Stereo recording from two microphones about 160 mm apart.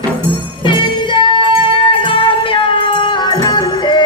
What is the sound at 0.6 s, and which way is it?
Music, 30° left (ahead or behind).